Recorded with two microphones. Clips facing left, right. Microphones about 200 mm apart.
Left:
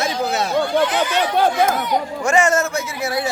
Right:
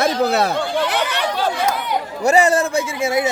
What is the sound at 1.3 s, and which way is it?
Speech, 55° left (ahead or behind).